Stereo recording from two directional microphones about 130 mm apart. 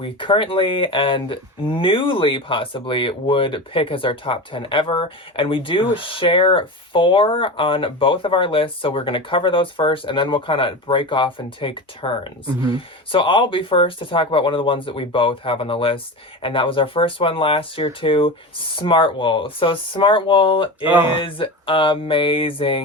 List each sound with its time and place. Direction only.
0.0 s speech: 40° left (ahead or behind)
20.8 s speech: 15° right (ahead or behind)
21.2 s speech: 40° left (ahead or behind)